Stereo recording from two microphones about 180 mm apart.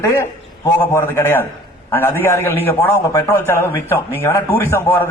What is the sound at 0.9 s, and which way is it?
A man's voice, 10° left (ahead or behind).